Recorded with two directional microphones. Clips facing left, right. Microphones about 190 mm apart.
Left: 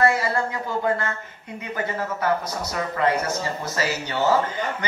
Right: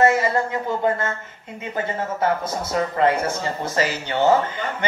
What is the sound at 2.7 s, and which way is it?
Speech, 30° right (ahead or behind).